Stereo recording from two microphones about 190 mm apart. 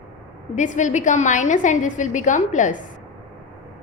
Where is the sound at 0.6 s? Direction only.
40° left (ahead or behind).